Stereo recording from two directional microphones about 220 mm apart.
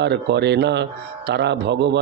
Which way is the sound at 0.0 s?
50° right (ahead or behind).